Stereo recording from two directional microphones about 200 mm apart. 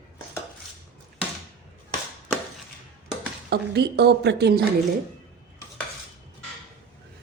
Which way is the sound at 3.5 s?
55° right (ahead or behind).